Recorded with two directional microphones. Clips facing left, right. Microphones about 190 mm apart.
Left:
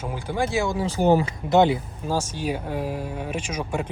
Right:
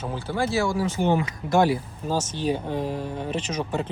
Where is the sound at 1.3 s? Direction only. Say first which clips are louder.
Left 2 dB; 20° left (ahead or behind).